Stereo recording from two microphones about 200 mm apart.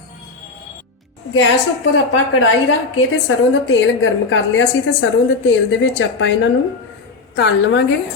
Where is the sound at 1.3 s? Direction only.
75° left (ahead or behind).